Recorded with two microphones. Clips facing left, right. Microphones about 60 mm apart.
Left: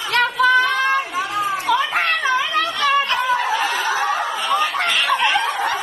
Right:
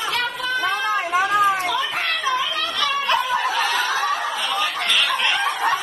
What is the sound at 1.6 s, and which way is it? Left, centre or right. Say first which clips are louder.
Chatter: left 5 dB; left.